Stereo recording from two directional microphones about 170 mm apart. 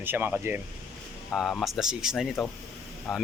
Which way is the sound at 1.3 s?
Centre (ahead or behind).